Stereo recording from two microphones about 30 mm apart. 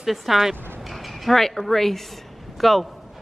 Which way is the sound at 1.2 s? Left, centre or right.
Centre.